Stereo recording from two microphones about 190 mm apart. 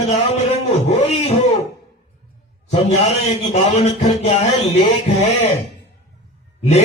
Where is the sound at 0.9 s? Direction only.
35° left (ahead or behind).